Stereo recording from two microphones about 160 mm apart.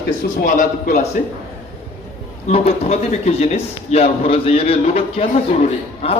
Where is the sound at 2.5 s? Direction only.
45° left (ahead or behind).